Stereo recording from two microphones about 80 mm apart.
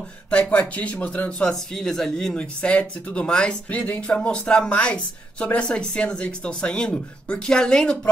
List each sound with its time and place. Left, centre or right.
0.3 s a woman's voice: centre
1.5 s a woman's voice: centre